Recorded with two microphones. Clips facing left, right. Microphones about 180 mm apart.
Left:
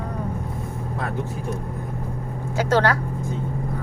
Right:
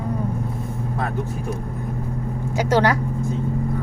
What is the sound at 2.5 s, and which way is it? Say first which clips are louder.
Speech: right 1 dB; 15° right (ahead or behind).